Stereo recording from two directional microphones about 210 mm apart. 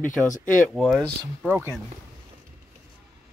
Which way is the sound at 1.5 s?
10° right (ahead or behind).